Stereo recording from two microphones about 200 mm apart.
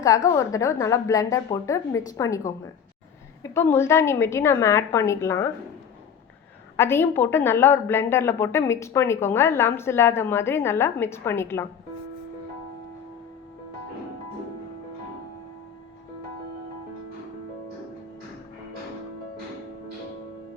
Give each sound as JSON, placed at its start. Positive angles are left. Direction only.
{"t": 0.3, "sound": "a woman's voice", "side_deg": 15}
{"t": 3.4, "sound": "a woman's voice", "side_deg": 15}
{"t": 6.7, "sound": "a woman's voice", "side_deg": 10}